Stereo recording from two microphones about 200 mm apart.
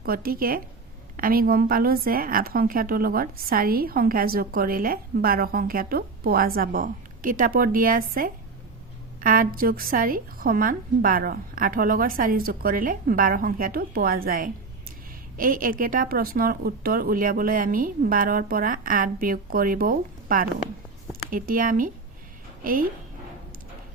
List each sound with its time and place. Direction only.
0.0 s a woman's voice: 45° right (ahead or behind)